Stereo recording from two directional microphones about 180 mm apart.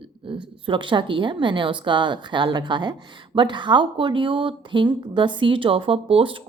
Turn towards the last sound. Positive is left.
turn(degrees=-30)  # may be behind; listen again after turning